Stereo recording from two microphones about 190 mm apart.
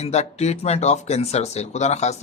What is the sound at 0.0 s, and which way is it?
Speech, 35° left (ahead or behind).